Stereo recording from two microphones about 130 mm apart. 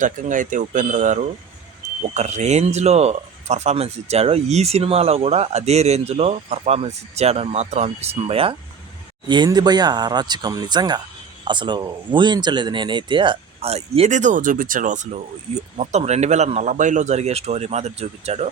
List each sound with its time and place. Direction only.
0.0 s speech: 85° right
2.1 s speech: 60° right (ahead or behind)
9.2 s speech: 35° right (ahead or behind); by 15.2 s 70° right (ahead or behind)
15.8 s speech: 60° right (ahead or behind)